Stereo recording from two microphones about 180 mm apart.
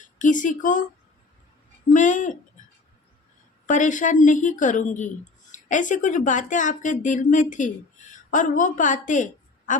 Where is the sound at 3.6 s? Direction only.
45° left (ahead or behind).